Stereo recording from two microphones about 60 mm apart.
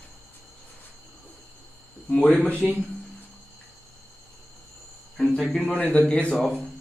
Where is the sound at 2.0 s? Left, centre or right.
Centre.